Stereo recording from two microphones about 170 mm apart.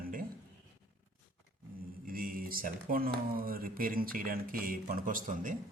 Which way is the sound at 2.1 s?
55° right (ahead or behind).